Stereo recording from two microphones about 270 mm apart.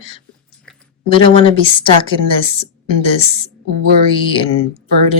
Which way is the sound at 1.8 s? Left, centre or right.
Centre.